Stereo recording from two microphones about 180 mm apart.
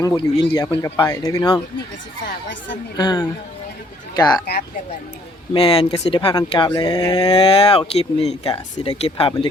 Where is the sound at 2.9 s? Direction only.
25° left (ahead or behind).